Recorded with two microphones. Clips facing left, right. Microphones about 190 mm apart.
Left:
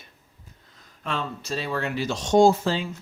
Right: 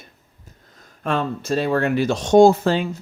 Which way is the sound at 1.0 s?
55° right (ahead or behind).